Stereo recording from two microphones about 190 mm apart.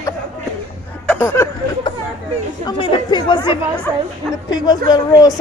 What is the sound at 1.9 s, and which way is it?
Chatter, 25° left (ahead or behind).